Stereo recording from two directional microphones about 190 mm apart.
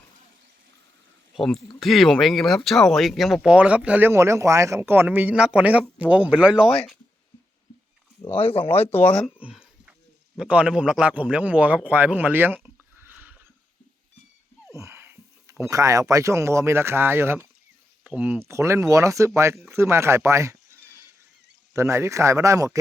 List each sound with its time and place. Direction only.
1.4 s speech: centre (ahead or behind)
8.6 s speech: 10° left (ahead or behind)
9.2 s a sound: 5° right (ahead or behind)
10.3 s speech: 5° right (ahead or behind)
13.0 s a sound: 10° right (ahead or behind)
14.8 s speech: 10° right (ahead or behind)